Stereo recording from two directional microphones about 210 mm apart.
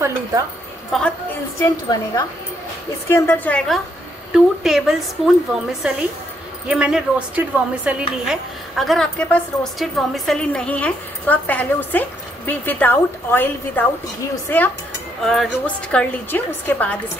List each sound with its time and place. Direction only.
0.0 s a woman's voice: 15° right (ahead or behind)
0.9 s a woman's voice: centre (ahead or behind)
1.6 s a woman's voice: 15° left (ahead or behind)